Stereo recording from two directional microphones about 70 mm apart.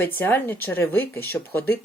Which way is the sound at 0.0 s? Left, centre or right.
Left.